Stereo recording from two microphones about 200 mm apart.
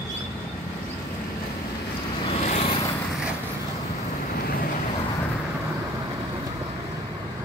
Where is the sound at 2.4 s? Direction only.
35° left (ahead or behind).